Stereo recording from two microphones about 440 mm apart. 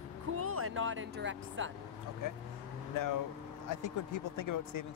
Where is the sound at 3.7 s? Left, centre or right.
Left.